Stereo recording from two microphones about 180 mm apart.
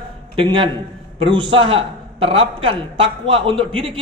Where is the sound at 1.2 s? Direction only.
30° right (ahead or behind).